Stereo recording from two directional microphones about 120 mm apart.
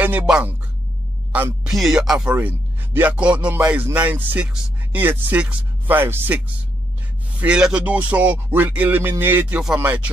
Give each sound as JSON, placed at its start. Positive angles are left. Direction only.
{"t": 0.0, "sound": "a man's voice", "side_deg": -15}
{"t": 1.7, "sound": "a man's voice", "side_deg": -5}